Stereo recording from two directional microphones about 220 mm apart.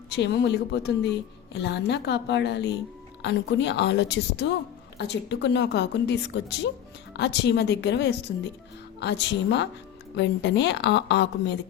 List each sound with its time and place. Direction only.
0.2 s a woman's voice: 50° left (ahead or behind)